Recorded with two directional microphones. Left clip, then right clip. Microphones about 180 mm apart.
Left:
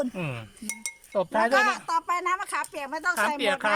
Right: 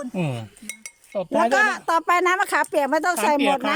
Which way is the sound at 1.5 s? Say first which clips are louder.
Right 4 dB; 45° right (ahead or behind).